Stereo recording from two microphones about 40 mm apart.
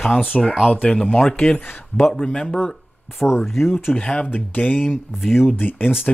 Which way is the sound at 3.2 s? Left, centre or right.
Left.